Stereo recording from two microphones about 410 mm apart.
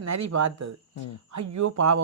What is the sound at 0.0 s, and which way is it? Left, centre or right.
Speech, right.